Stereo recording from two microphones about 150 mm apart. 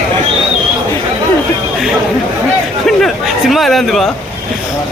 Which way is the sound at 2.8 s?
Centre (ahead or behind).